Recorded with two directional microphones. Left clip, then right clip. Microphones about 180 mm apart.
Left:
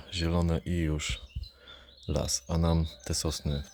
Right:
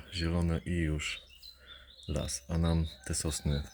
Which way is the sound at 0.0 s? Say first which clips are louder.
Left 4 dB; 20° left (ahead or behind).